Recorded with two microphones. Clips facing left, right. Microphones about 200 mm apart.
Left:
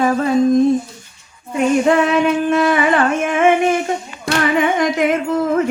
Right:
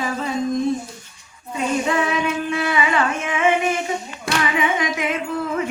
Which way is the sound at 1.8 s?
50° left (ahead or behind).